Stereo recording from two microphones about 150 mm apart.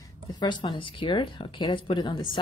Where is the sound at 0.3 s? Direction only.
30° left (ahead or behind).